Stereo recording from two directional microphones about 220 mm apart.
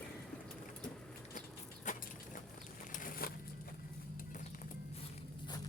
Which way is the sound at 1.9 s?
35° left (ahead or behind).